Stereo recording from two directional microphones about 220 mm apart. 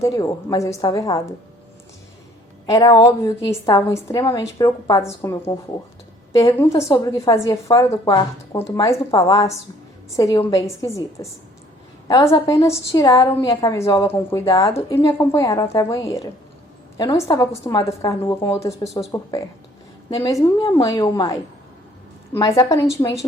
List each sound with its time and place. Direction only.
0.0 s a woman's voice: 15° left (ahead or behind)
2.6 s a woman's voice: 15° left (ahead or behind)